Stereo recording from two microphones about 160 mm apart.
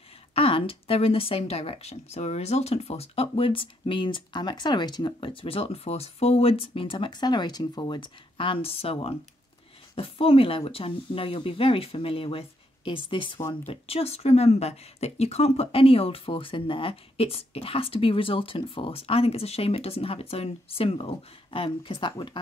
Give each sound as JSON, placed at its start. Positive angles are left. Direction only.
{"t": 0.3, "sound": "speech", "side_deg": 35}